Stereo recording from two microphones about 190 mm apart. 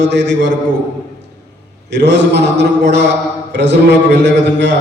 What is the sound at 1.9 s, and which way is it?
A man's voice, 65° right (ahead or behind).